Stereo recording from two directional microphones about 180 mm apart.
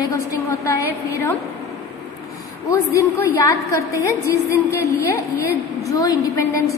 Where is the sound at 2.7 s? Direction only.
15° left (ahead or behind).